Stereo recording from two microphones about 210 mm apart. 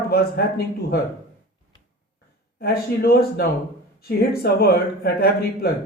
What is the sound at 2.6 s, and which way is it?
Speech, 45° left (ahead or behind).